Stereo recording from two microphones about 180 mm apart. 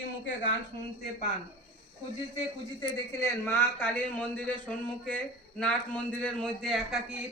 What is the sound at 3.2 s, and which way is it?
A man's voice, 15° left (ahead or behind).